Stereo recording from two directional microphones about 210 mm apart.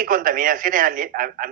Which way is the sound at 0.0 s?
40° right (ahead or behind).